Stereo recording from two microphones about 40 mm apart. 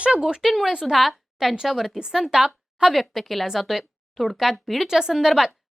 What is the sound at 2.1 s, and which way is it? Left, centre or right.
Speech, centre.